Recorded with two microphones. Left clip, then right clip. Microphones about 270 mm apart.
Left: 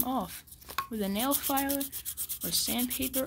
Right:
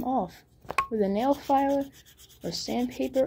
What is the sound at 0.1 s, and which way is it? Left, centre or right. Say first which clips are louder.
Rub: right 5 dB; left.